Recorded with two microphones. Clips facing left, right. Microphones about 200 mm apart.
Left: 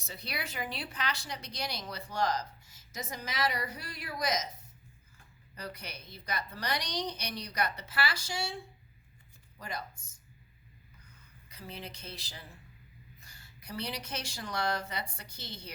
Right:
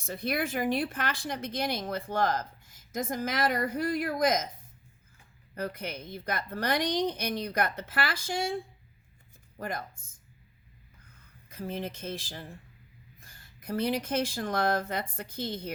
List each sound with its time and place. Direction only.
0.0 s speech: 50° right (ahead or behind)
5.5 s speech: 50° right (ahead or behind)
11.4 s speech: 50° right (ahead or behind)